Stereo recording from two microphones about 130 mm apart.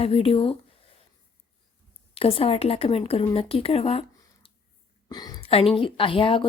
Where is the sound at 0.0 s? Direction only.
50° left (ahead or behind).